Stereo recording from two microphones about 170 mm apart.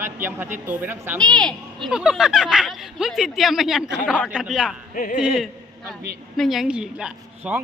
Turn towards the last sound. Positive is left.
turn(degrees=-5)  # may be behind; listen again after turning